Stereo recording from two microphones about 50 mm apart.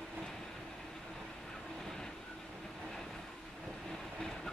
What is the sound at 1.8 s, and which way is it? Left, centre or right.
Vehicle, centre.